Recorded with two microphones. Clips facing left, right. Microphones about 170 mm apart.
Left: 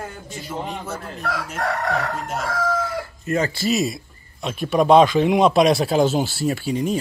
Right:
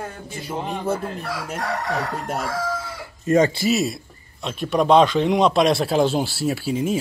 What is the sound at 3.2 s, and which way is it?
Speech, 25° right (ahead or behind).